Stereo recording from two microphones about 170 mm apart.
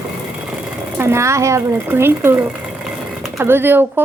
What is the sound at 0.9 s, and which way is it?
Speech, 15° right (ahead or behind).